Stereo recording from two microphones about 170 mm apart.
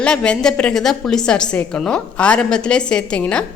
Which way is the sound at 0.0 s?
5° left (ahead or behind).